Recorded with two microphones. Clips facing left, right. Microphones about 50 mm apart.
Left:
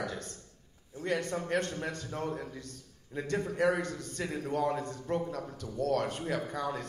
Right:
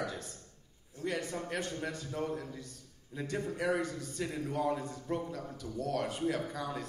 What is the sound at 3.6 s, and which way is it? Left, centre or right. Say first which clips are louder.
Speech: left 4 dB; left.